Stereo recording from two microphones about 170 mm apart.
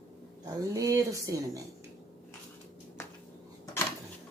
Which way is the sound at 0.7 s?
20° right (ahead or behind).